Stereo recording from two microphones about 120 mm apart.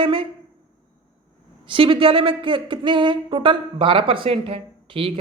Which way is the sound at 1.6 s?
45° right (ahead or behind).